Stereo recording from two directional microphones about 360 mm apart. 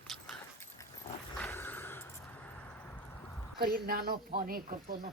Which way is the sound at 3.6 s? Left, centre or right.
Right.